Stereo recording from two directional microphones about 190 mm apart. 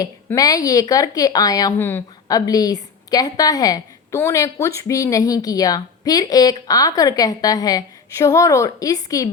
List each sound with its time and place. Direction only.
0.0 s speech: 20° left (ahead or behind)